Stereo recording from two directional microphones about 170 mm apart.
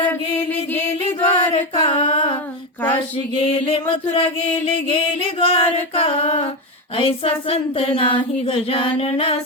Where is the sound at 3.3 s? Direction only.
30° left (ahead or behind).